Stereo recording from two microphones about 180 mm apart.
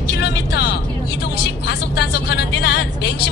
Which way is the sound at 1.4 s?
65° left (ahead or behind).